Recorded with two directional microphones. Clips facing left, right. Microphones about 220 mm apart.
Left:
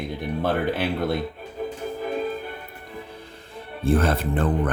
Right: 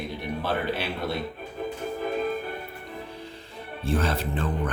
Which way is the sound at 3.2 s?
55° left (ahead or behind).